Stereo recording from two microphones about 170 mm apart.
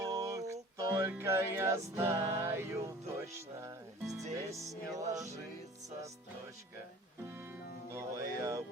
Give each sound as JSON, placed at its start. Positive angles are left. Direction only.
{"t": 0.0, "sound": "music", "side_deg": -20}
{"t": 4.4, "sound": "music", "side_deg": -20}
{"t": 5.0, "sound": "music", "side_deg": -45}
{"t": 7.9, "sound": "music", "side_deg": -15}